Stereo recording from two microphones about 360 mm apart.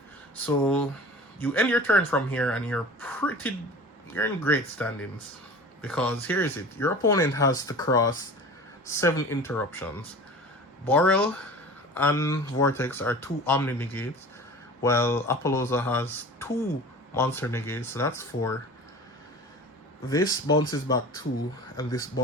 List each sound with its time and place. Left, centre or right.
0.4 s speech: centre
20.1 s speech: centre
21.8 s speech: centre